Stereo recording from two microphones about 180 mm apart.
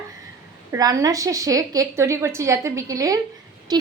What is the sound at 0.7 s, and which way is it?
A woman's voice, 20° right (ahead or behind).